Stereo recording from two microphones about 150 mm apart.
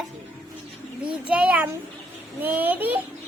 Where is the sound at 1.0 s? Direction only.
10° right (ahead or behind).